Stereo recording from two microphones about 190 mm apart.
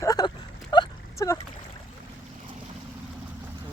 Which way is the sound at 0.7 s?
20° left (ahead or behind).